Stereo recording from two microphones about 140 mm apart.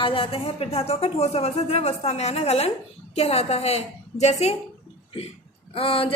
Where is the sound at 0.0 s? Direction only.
40° left (ahead or behind).